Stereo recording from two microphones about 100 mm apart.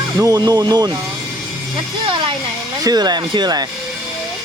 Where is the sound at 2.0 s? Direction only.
55° right (ahead or behind).